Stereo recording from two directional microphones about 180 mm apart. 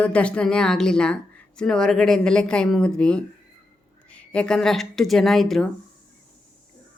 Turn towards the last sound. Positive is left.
turn(degrees=0)  # may be behind; listen again after turning